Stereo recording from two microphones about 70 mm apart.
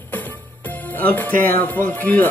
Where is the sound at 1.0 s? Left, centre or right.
Left.